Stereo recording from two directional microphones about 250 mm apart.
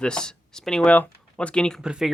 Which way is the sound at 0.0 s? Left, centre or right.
Centre.